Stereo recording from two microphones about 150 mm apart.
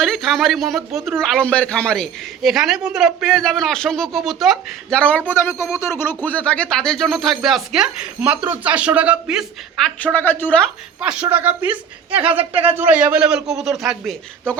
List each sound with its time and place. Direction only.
0.0 s speech: centre (ahead or behind)
11.0 s a woman's voice: 10° right (ahead or behind)
12.4 s speech: 40° right (ahead or behind)
13.0 s speech: 5° right (ahead or behind)